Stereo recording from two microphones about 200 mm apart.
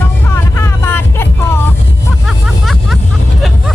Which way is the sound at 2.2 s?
Centre (ahead or behind).